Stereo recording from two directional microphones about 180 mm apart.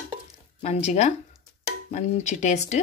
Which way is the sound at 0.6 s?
40° left (ahead or behind).